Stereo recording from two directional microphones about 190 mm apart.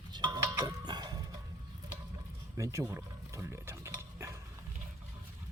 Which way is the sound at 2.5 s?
15° right (ahead or behind).